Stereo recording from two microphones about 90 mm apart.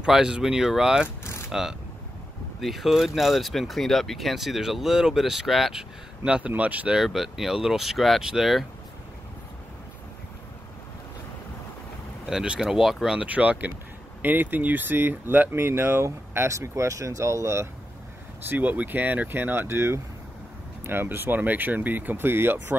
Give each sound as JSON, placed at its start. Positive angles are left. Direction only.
{"t": 0.0, "sound": "speech", "side_deg": -10}
{"t": 1.0, "sound": "speech", "side_deg": 25}
{"t": 1.5, "sound": "speech", "side_deg": -5}
{"t": 12.3, "sound": "speech", "side_deg": -5}
{"t": 18.5, "sound": "speech", "side_deg": -20}